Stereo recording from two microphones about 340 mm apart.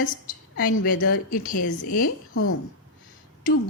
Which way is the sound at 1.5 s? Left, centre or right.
Left.